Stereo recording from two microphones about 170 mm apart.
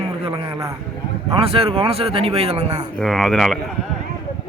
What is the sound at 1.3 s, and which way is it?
Speech, 35° right (ahead or behind).